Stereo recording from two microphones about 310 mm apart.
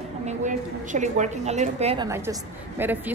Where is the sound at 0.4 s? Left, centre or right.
Right.